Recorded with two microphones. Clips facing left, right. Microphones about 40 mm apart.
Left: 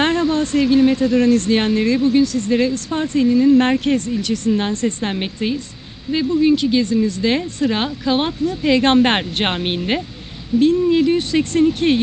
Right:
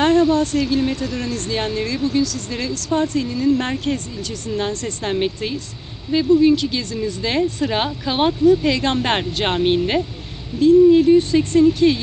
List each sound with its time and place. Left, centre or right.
0.0 s a woman's voice: left
3.5 s speech: left
4.6 s a woman's voice: left
5.1 s speech: centre
7.6 s speech: centre
8.8 s speech: left
9.4 s a woman's voice: left
10.6 s speech: left
11.6 s speech: left